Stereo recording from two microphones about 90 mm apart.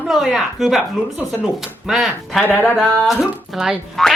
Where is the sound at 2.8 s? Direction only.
5° right (ahead or behind).